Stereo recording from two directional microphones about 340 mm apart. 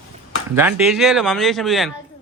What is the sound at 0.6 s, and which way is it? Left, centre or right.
Speech, centre.